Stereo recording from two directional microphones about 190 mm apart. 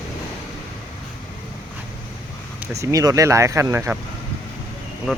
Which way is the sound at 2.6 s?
15° right (ahead or behind).